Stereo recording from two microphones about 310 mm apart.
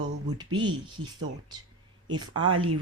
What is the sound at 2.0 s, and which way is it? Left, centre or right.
Speech, centre.